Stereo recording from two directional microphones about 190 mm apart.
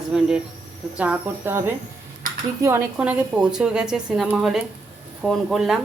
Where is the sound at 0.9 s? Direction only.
5° right (ahead or behind).